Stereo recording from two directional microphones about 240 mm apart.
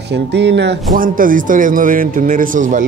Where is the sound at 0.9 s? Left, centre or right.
Right.